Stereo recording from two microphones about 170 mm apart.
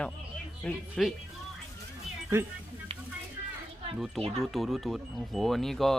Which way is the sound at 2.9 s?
35° right (ahead or behind).